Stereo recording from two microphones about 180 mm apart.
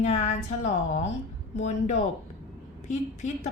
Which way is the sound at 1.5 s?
40° left (ahead or behind).